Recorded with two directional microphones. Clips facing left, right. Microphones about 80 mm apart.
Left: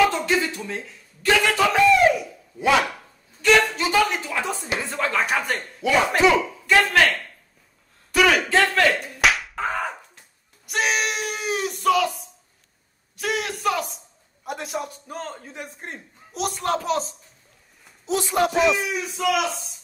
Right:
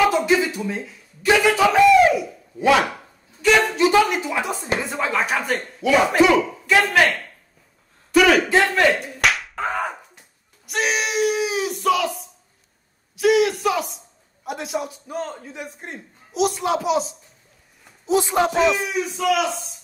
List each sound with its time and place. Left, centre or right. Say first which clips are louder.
0.0 s a sound: right 3 dB; centre
3.4 s a woman's voice: right 2 dB; centre
8.5 s a man's voice: right 2 dB; centre
8.9 s slap: even; centre
10.7 s a man's voice: right 1 dB; centre
15.6 s a man's voice: right 1 dB; left
16.3 s speech: right 4 dB; centre
18.0 s speech: right 3 dB; right
18.5 s speech: right 1 dB; centre